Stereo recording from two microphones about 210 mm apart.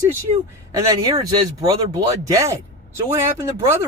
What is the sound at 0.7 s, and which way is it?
Speech, 15° right (ahead or behind).